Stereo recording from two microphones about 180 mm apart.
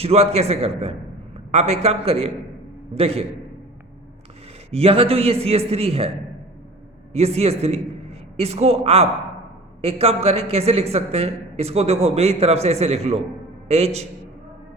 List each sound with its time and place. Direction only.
0.0 s a woman's voice: 35° right (ahead or behind)
4.7 s a woman's voice: 35° right (ahead or behind)
7.1 s a man's voice: 35° right (ahead or behind)